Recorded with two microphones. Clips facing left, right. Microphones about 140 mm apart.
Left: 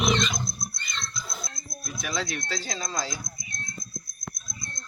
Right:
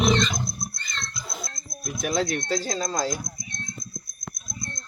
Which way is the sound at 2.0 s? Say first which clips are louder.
Right 7 dB; 50° right (ahead or behind).